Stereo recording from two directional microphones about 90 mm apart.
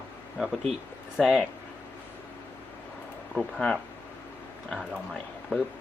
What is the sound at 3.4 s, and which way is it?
Speech, 5° left (ahead or behind).